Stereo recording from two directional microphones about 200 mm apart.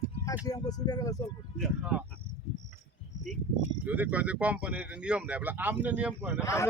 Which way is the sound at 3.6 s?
10° right (ahead or behind).